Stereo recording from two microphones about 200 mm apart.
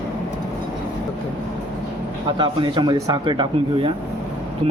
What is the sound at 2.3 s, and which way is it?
Speech, 25° right (ahead or behind).